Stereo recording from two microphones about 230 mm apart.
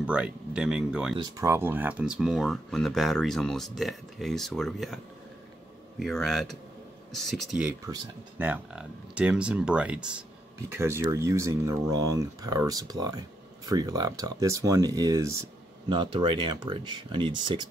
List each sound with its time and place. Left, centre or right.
0.0 s speech: centre
1.1 s speech: centre